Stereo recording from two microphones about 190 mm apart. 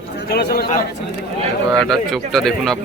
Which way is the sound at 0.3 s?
55° left (ahead or behind).